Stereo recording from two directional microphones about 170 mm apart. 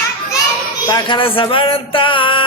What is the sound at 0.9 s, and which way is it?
Music, 25° left (ahead or behind).